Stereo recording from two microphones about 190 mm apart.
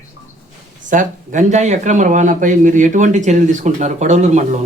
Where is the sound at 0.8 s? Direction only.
40° right (ahead or behind).